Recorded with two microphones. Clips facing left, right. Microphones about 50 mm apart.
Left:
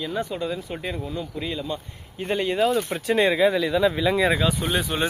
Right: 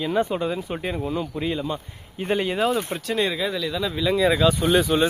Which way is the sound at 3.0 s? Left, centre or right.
Left.